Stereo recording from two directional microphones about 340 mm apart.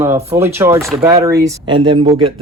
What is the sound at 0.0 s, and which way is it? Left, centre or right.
Speech, centre.